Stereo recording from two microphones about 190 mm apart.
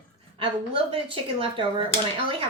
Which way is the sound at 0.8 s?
30° right (ahead or behind).